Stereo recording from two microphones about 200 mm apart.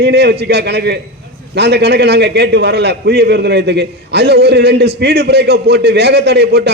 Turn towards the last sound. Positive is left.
turn(degrees=-55)  # may be behind; listen again after turning